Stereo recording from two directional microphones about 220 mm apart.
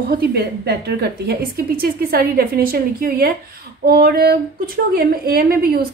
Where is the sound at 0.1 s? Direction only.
45° right (ahead or behind).